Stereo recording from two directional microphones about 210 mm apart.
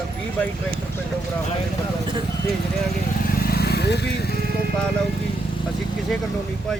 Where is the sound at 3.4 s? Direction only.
50° left (ahead or behind).